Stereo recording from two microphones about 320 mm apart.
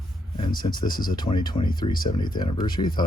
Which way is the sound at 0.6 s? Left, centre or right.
Centre.